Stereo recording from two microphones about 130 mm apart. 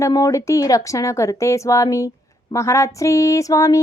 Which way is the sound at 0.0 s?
25° left (ahead or behind).